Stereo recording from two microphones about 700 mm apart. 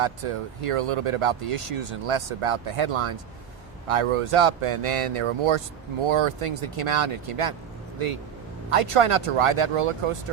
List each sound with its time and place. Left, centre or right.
0.0 s speech: right